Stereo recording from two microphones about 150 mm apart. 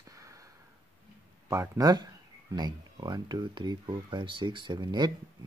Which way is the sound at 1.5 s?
20° right (ahead or behind).